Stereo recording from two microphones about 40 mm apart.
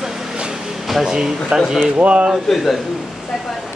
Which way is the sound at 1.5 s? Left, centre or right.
Right.